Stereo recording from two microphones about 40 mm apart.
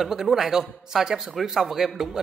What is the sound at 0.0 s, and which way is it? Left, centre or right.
Speech, centre.